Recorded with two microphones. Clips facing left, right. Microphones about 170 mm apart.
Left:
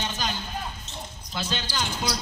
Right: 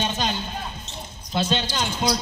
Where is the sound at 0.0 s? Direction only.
25° right (ahead or behind).